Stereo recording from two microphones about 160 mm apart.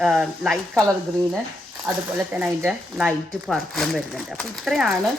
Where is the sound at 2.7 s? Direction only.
Centre (ahead or behind).